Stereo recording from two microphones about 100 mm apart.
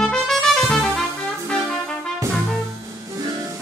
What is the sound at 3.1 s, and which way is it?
Music, 35° right (ahead or behind).